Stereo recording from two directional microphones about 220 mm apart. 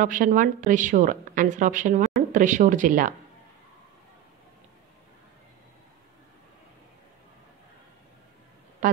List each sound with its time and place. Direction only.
0.0 s a woman's voice: 35° right (ahead or behind)